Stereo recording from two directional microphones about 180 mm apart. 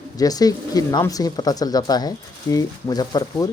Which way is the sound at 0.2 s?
20° left (ahead or behind).